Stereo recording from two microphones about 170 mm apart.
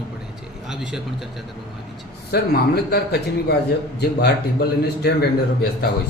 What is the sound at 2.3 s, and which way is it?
Speech, 65° left (ahead or behind).